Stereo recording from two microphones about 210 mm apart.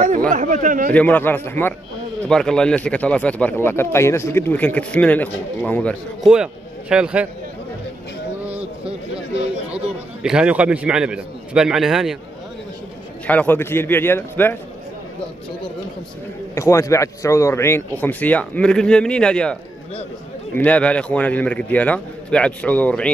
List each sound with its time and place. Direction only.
0.3 s speech: 40° right (ahead or behind)
0.9 s a man's voice: 10° left (ahead or behind)
8.5 s a sound: 5° right (ahead or behind)
10.2 s a man's voice: 5° right (ahead or behind)
13.3 s a man's voice: 10° left (ahead or behind)
16.5 s a man's voice: 15° left (ahead or behind)